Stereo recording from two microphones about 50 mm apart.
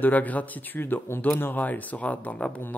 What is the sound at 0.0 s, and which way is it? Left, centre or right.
Speech, left.